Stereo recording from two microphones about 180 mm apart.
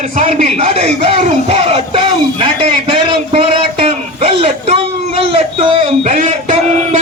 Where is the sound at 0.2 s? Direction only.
40° right (ahead or behind).